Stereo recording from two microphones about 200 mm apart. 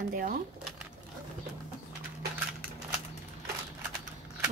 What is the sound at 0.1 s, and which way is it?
Speech, 45° right (ahead or behind).